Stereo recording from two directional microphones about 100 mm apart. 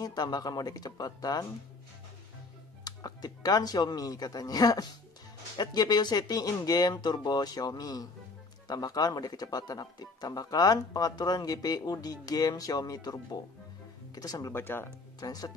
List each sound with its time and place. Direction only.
0.0 s speech: 40° left (ahead or behind)
2.8 s speech: 40° left (ahead or behind)
14.5 s speech: 20° left (ahead or behind)
15.1 s speech: 40° left (ahead or behind)